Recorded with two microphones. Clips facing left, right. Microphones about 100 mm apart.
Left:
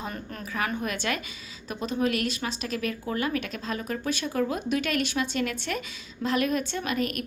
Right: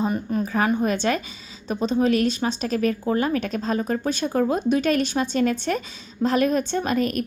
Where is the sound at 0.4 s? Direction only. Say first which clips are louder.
Right 6 dB; 30° right (ahead or behind).